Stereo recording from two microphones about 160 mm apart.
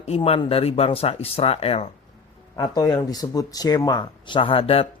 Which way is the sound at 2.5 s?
25° left (ahead or behind).